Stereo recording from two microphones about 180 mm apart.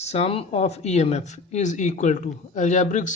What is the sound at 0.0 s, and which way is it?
Speech, 35° left (ahead or behind).